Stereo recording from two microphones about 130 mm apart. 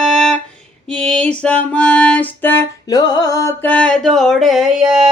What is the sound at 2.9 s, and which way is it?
Music, 30° left (ahead or behind).